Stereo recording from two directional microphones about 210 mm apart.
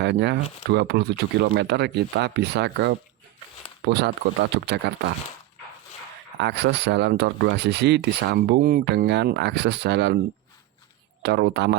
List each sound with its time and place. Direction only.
0.0 s speech: 55° right (ahead or behind)
6.4 s speech: 55° right (ahead or behind)
11.2 s speech: 50° right (ahead or behind)